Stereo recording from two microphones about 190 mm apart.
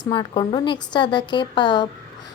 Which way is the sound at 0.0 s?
25° left (ahead or behind).